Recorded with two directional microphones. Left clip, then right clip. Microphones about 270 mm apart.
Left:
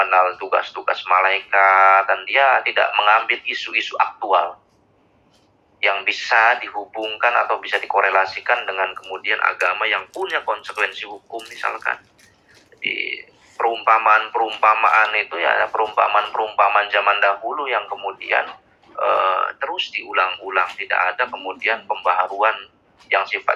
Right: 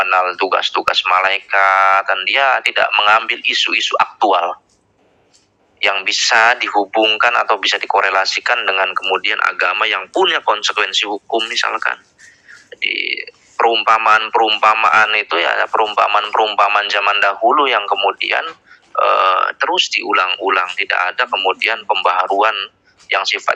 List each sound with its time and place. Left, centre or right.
0.0 s speech: right
5.8 s speech: right